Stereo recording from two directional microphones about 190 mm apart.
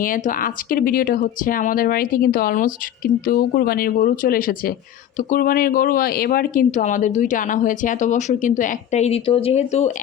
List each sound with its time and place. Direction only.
0.0 s speech: 45° left (ahead or behind)